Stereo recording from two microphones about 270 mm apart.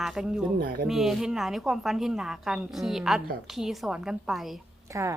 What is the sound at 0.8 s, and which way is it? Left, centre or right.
A woman's voice, centre.